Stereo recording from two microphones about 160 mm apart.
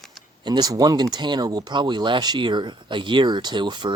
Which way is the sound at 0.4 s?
25° right (ahead or behind).